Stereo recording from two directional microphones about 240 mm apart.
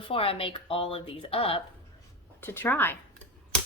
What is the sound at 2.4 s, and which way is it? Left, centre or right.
Speech, centre.